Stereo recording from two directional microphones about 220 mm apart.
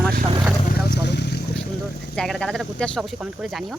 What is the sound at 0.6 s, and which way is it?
Vehicle, 45° left (ahead or behind).